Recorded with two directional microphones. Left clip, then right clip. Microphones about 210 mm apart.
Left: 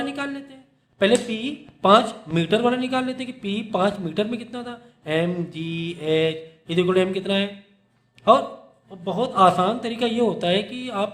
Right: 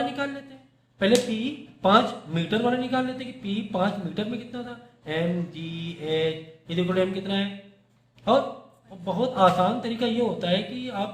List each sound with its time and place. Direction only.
0.9 s speech: 45° left (ahead or behind)
9.0 s speech: 40° left (ahead or behind)